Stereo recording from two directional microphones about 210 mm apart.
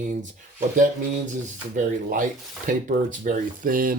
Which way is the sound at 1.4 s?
40° right (ahead or behind).